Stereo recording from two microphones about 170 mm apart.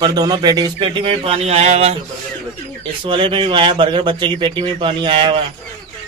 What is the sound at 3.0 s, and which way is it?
Speech, 30° right (ahead or behind).